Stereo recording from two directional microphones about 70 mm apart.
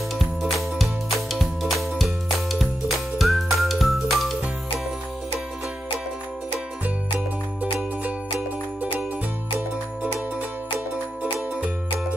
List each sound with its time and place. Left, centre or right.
0.2 s music: centre
3.2 s music: centre